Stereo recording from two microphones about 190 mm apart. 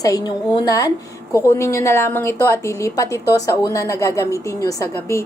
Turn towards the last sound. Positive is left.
turn(degrees=15)  # may be behind; listen again after turning